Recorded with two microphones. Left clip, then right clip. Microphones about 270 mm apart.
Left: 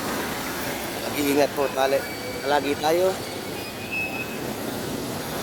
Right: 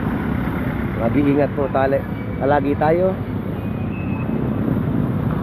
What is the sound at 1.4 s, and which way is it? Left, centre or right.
Speech, left.